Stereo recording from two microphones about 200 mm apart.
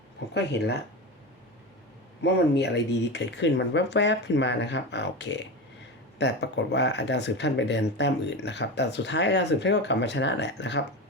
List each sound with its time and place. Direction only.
0.3 s speech: 55° left (ahead or behind)
2.2 s speech: 55° left (ahead or behind)